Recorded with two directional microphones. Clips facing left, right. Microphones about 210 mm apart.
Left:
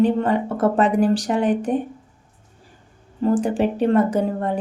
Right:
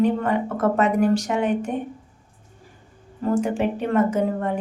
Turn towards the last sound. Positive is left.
turn(degrees=35)  # may be behind; listen again after turning